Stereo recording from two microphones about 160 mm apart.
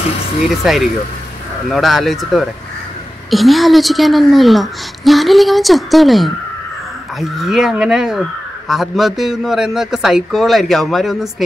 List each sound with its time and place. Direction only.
0.7 s a woman's voice: centre (ahead or behind)